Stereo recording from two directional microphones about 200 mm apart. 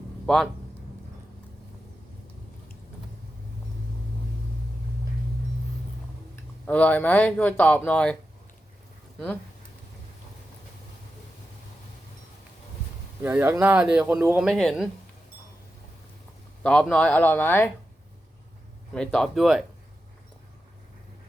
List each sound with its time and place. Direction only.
6.7 s speech: 5° left (ahead or behind)
13.2 s speech: 10° right (ahead or behind)
16.6 s speech: 5° left (ahead or behind)
18.9 s speech: centre (ahead or behind)